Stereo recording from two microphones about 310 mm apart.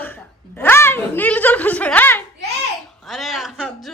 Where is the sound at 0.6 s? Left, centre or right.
Centre.